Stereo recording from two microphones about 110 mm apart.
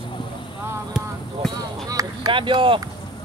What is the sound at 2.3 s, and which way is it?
Speech, 50° right (ahead or behind).